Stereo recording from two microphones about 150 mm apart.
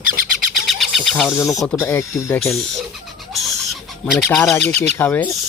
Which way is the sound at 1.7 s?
15° left (ahead or behind).